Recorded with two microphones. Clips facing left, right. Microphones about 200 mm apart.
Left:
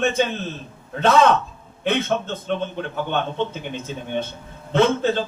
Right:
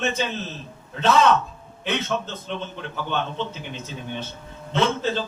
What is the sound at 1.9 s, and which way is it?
Speech, 55° left (ahead or behind).